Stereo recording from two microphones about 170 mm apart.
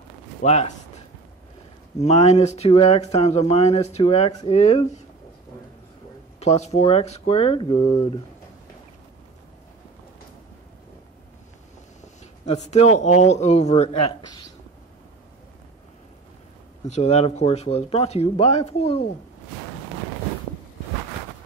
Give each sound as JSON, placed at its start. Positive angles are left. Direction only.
{"t": 0.4, "sound": "speech", "side_deg": 40}
{"t": 6.4, "sound": "speech", "side_deg": 40}
{"t": 12.0, "sound": "speech", "side_deg": 45}
{"t": 16.9, "sound": "speech", "side_deg": 40}